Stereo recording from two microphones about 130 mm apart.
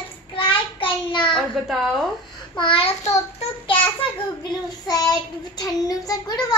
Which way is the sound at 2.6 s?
45° left (ahead or behind).